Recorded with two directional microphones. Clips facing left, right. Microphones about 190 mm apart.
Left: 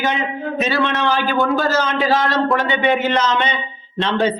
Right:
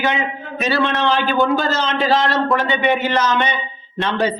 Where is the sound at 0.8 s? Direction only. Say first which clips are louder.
Right 3 dB; 15° right (ahead or behind).